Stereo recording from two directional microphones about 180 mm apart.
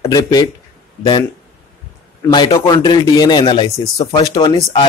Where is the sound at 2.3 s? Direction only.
25° left (ahead or behind).